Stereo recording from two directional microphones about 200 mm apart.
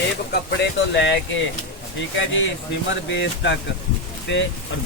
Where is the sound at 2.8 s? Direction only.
65° left (ahead or behind).